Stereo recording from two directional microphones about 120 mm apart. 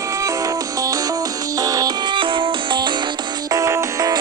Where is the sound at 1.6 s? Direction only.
30° right (ahead or behind).